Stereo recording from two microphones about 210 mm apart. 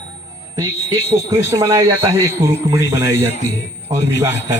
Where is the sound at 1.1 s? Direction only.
15° right (ahead or behind).